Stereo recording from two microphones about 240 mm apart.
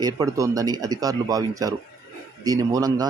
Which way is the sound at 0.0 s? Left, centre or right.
Centre.